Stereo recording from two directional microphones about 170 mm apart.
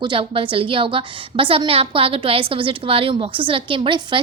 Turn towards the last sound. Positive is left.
turn(degrees=-30)  # may be behind; listen again after turning